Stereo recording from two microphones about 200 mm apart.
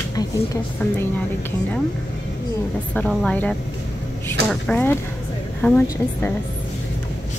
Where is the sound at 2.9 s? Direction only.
5° left (ahead or behind).